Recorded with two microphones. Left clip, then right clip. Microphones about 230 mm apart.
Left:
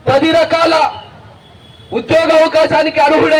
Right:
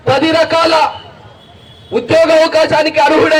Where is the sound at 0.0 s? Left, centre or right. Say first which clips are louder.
Even; right.